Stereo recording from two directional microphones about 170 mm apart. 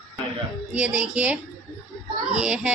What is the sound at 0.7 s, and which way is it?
Speech, 5° right (ahead or behind).